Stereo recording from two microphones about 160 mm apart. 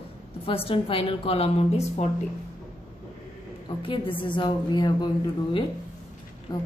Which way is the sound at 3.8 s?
30° left (ahead or behind).